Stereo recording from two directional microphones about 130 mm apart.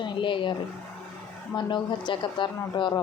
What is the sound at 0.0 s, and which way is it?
Speech, 40° left (ahead or behind).